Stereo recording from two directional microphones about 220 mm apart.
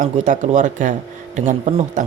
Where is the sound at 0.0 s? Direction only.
35° right (ahead or behind).